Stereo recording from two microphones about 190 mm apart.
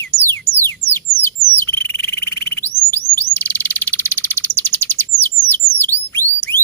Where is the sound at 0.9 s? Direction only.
10° left (ahead or behind).